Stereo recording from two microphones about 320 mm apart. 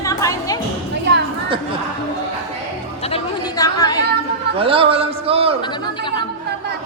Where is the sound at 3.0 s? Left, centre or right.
Centre.